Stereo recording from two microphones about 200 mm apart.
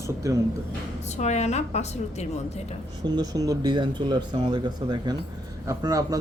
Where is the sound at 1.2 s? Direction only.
35° left (ahead or behind).